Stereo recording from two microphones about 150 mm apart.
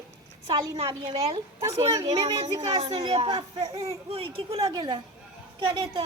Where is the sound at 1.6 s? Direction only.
25° right (ahead or behind).